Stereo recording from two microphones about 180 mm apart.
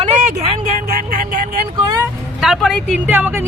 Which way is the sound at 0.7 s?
55° right (ahead or behind).